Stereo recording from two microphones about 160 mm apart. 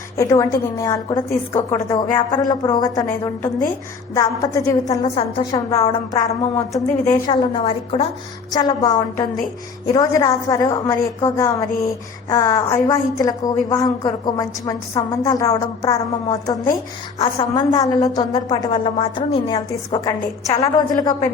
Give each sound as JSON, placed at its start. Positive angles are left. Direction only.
{"t": 0.2, "sound": "a woman's voice", "side_deg": 20}
{"t": 8.4, "sound": "a woman's voice", "side_deg": 25}